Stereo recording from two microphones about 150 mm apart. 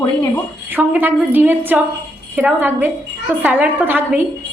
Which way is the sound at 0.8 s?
15° right (ahead or behind).